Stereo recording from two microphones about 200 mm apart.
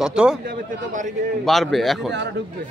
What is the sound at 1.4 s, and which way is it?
Speech, centre (ahead or behind).